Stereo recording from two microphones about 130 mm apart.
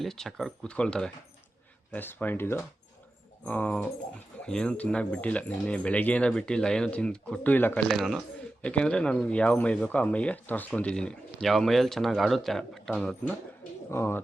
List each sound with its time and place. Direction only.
0.0 s speech: 5° left (ahead or behind)
7.9 s speech: centre (ahead or behind)
13.9 s speech: 20° left (ahead or behind)